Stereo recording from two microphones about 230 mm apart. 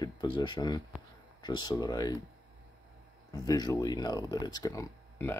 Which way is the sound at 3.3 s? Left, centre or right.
Centre.